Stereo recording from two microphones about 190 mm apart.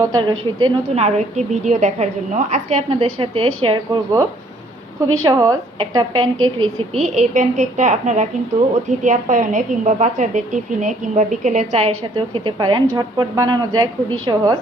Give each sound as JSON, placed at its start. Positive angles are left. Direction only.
{"t": 0.0, "sound": "a woman's voice", "side_deg": -20}
{"t": 1.0, "sound": "a woman's voice", "side_deg": -40}
{"t": 5.2, "sound": "a woman's voice", "side_deg": -20}
{"t": 6.4, "sound": "speech", "side_deg": -90}
{"t": 7.0, "sound": "a woman's voice", "side_deg": -35}
{"t": 12.1, "sound": "a woman's voice", "side_deg": -25}